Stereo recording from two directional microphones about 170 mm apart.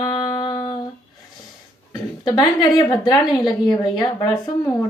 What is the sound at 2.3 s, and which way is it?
Female singing, 25° left (ahead or behind).